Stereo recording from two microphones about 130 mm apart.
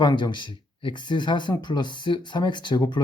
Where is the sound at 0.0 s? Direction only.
35° left (ahead or behind).